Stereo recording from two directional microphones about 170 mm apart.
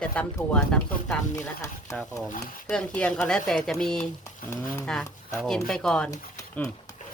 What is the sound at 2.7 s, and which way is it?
Speech, 5° left (ahead or behind).